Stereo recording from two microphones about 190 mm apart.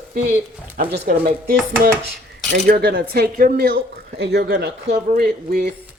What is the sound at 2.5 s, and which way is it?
Speech, 55° right (ahead or behind).